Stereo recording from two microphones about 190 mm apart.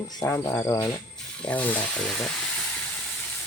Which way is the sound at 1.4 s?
10° left (ahead or behind).